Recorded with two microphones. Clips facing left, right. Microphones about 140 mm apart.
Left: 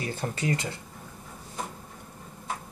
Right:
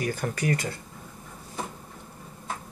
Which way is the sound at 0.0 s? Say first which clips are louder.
Right 2 dB; 25° left (ahead or behind).